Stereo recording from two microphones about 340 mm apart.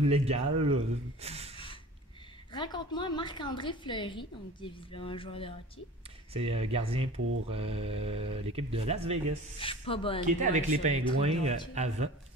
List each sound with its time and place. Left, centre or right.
0.0 s speech: centre
2.5 s a woman's voice: centre
6.3 s speech: centre
7.2 s mantra: right
7.5 s speech: centre
9.6 s a woman's voice: centre
10.2 s speech: right